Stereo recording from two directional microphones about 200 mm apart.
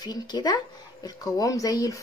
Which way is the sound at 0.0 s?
20° left (ahead or behind).